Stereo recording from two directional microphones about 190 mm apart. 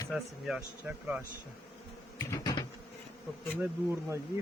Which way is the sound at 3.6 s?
10° right (ahead or behind).